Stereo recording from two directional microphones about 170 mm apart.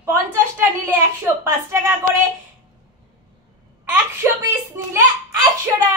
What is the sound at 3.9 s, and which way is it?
A woman's voice, 15° right (ahead or behind).